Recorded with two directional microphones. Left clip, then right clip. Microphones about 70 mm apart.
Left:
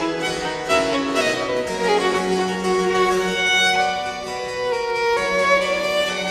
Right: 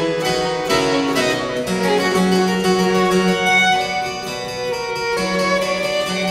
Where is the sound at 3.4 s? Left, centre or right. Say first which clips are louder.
Right 3 dB; centre.